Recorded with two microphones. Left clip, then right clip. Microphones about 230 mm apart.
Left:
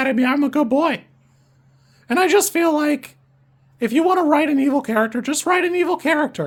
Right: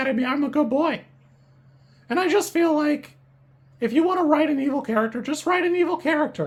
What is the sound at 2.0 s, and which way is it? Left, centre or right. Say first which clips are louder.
Speech: left 5 dB; left.